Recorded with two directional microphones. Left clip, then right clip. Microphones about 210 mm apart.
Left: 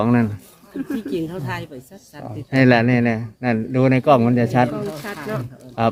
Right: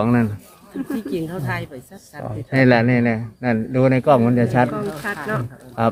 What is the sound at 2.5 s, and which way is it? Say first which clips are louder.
Speech: even; 10° left (ahead or behind).